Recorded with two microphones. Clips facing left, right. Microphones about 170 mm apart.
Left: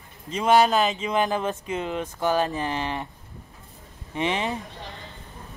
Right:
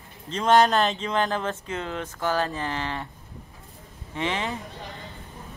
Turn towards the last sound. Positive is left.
turn(degrees=20)  # may be behind; listen again after turning